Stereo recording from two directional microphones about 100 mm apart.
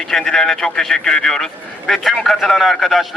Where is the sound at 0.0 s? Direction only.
5° left (ahead or behind).